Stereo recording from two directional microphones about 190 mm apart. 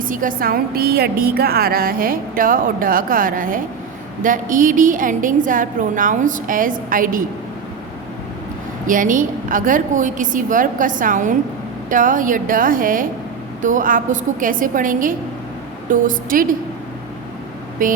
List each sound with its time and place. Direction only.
0.0 s a woman's voice: 45° right (ahead or behind)
8.9 s a woman's voice: 45° right (ahead or behind)
17.8 s a woman's voice: 45° right (ahead or behind)